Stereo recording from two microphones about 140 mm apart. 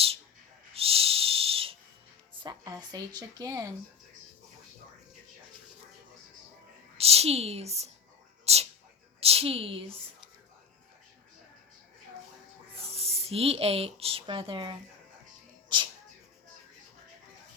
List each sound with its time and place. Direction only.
0.7 s owl: 45° right (ahead or behind)
2.3 s a woman's voice: 30° right (ahead or behind)
6.9 s a woman's voice: 45° right (ahead or behind)
12.8 s speech: 45° right (ahead or behind)